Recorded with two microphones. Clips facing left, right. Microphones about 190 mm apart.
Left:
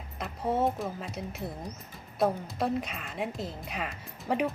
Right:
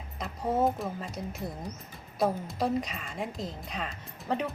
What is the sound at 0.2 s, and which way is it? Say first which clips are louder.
A woman's voice: right 1 dB; centre (ahead or behind).